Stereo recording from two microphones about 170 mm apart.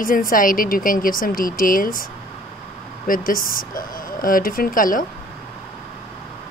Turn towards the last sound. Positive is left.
turn(degrees=55)  # may be behind; listen again after turning